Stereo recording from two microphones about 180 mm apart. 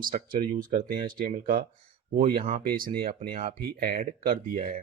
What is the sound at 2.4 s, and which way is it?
Speech, 35° right (ahead or behind).